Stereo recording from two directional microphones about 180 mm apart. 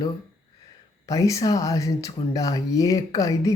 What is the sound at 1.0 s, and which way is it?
Speech, 20° left (ahead or behind).